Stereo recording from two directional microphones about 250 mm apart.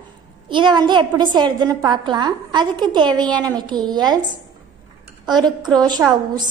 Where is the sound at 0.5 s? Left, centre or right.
Centre.